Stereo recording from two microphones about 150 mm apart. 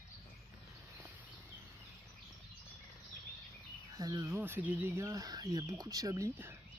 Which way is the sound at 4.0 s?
25° right (ahead or behind).